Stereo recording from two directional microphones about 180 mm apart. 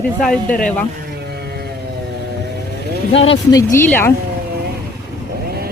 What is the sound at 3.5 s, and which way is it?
Speech, 20° left (ahead or behind).